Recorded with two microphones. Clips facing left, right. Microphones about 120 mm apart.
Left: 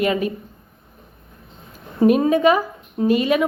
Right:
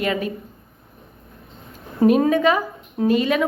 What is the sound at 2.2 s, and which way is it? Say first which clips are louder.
Speech: left 2 dB; 15° left (ahead or behind).